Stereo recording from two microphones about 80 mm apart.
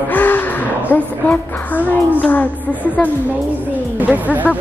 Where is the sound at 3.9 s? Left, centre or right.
Right.